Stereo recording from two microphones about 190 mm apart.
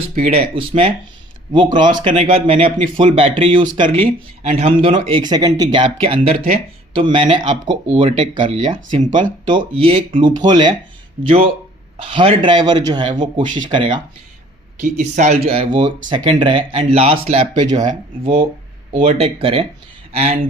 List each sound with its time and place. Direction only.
0.2 s speech: 30° right (ahead or behind)
14.8 s speech: 40° right (ahead or behind)